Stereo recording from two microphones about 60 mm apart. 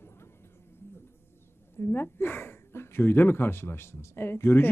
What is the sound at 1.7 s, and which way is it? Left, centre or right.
Speech, left.